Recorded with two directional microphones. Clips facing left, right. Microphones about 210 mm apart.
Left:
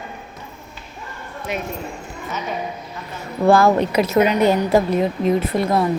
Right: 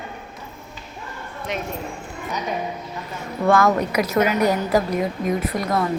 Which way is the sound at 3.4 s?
30° left (ahead or behind).